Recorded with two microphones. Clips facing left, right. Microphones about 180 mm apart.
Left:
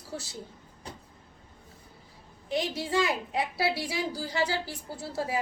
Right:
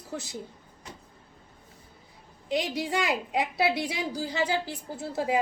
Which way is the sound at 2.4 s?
20° right (ahead or behind).